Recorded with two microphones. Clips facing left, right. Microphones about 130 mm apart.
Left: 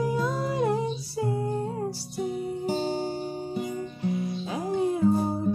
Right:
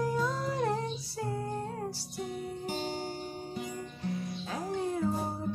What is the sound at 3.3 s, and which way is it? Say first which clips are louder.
Music: left 7 dB; 20° left (ahead or behind).